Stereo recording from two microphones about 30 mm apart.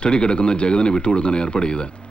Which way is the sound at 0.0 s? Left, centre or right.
Left.